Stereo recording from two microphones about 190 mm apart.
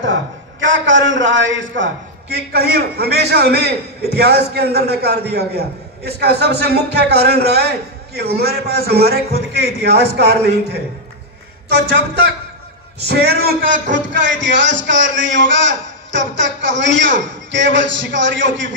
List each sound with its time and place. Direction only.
0.6 s a man's voice: 80° right; by 10.3 s 60° right (ahead or behind)
13.0 s a man's voice: 60° right (ahead or behind); by 18.8 s 75° right (ahead or behind)